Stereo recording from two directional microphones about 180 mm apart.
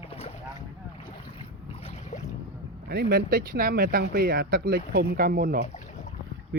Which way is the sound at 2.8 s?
65° right (ahead or behind).